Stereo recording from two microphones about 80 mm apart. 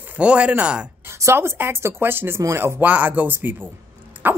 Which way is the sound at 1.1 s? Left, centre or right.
Right.